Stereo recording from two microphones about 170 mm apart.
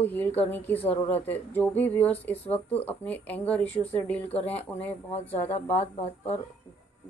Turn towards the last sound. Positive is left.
turn(degrees=40)  # may be behind; listen again after turning